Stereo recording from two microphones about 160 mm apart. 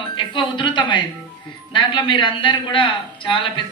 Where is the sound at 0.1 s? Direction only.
30° left (ahead or behind).